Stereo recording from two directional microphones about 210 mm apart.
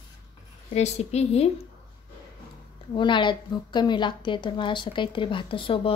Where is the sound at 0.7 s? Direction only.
30° left (ahead or behind).